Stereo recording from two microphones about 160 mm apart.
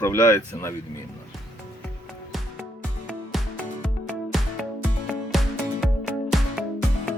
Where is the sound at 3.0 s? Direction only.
5° left (ahead or behind).